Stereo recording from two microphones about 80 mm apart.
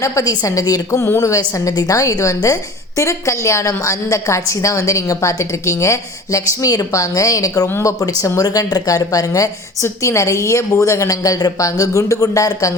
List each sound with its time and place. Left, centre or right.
0.0 s a woman's voice: left
7.7 s a woman's voice: left
7.9 s a woman's voice: left